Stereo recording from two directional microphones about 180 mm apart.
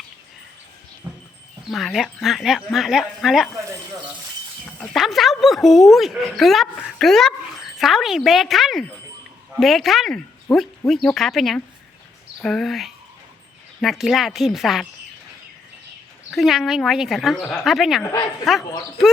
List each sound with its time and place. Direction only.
1.0 s a sound: 25° right (ahead or behind)
1.6 s a woman's voice: centre (ahead or behind)
4.8 s a woman's voice: centre (ahead or behind)
16.3 s a woman's voice: centre (ahead or behind)